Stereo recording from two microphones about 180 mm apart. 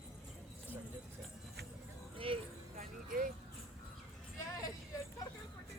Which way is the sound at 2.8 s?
50° right (ahead or behind).